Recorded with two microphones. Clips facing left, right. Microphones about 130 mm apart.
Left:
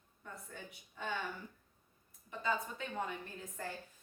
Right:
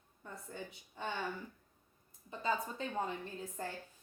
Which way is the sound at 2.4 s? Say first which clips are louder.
Right 2 dB; 35° right (ahead or behind).